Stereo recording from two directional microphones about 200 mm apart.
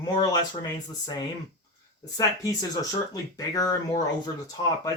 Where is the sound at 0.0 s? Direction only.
20° left (ahead or behind).